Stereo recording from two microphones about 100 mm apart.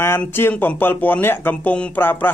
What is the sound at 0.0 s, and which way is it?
Speech, 25° left (ahead or behind).